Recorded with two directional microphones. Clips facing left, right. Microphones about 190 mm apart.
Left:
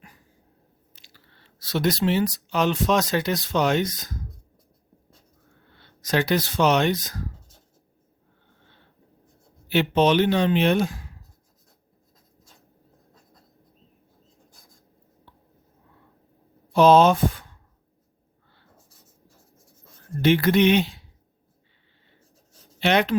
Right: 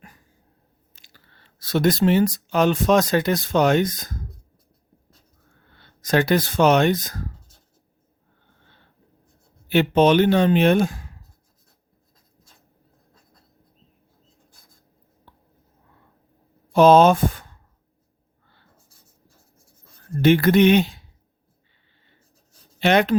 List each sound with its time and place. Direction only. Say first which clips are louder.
0.9 s speech: right 1 dB; 50° right (ahead or behind)
5.7 s speech: right 4 dB; 50° right (ahead or behind)
9.6 s speech: right 3 dB; 50° right (ahead or behind)
16.7 s speech: right 2 dB; 50° right (ahead or behind)
20.2 s speech: right 3 dB; 50° right (ahead or behind)
22.8 s speech: right 3 dB; 45° right (ahead or behind)